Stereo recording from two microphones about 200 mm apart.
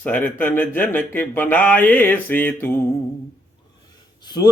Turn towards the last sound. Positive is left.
turn(degrees=20)  # may be behind; listen again after turning